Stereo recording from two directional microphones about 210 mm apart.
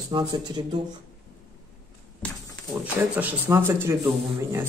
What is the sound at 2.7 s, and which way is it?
Speech, 10° right (ahead or behind).